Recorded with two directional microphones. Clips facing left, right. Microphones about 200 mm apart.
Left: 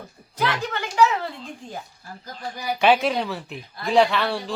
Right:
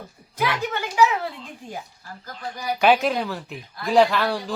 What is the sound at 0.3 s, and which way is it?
Speech, 10° right (ahead or behind).